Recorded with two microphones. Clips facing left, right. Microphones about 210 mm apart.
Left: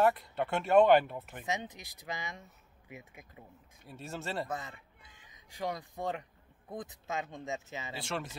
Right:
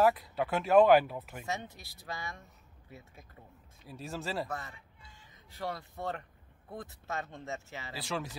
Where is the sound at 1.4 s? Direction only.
15° left (ahead or behind).